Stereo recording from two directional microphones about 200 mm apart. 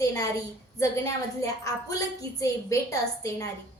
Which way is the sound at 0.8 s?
15° left (ahead or behind).